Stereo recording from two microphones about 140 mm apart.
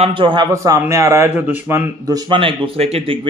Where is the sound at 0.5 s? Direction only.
25° right (ahead or behind).